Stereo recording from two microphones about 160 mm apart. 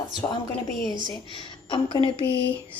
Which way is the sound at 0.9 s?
25° left (ahead or behind).